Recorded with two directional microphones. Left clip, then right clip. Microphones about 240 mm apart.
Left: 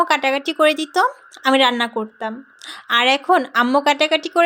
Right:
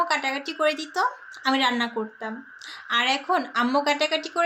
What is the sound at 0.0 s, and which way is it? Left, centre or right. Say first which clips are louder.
Speech: left 7 dB; left.